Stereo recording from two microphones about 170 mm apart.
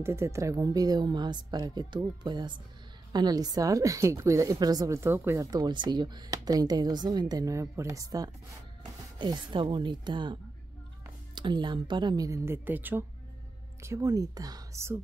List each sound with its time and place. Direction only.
0.0 s a woman's voice: 15° right (ahead or behind)